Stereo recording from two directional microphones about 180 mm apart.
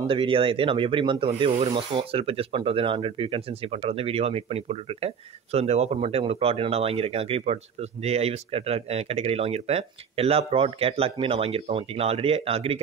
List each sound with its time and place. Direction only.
0.0 s speech: 30° right (ahead or behind)